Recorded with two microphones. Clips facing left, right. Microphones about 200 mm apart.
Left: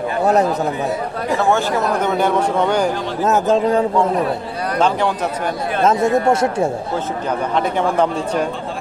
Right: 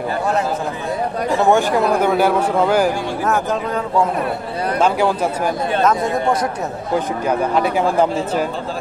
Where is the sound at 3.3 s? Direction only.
25° left (ahead or behind).